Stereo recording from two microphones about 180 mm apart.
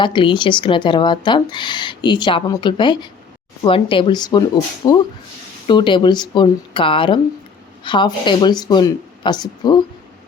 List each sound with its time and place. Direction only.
0.0 s speech: 25° left (ahead or behind)